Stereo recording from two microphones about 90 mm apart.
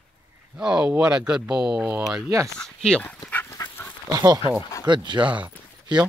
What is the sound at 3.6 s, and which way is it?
Dog, 45° left (ahead or behind).